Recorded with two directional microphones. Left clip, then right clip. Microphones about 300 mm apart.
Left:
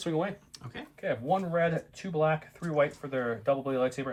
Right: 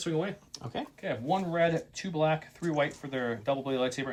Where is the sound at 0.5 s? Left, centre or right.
Centre.